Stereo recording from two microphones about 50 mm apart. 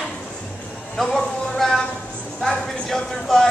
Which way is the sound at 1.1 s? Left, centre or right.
Centre.